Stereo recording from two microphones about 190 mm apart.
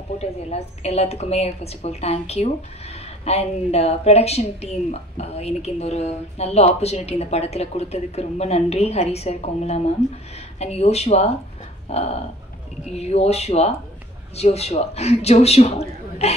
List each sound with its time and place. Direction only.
0.2 s speech: 35° left (ahead or behind)